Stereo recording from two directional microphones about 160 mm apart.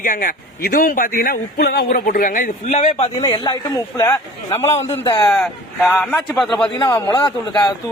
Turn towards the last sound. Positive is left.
turn(degrees=25)  # may be behind; listen again after turning